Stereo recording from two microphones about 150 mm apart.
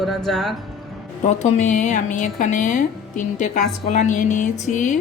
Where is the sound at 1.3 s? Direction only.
50° left (ahead or behind).